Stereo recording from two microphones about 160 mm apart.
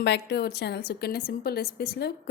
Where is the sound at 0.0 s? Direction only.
90° left.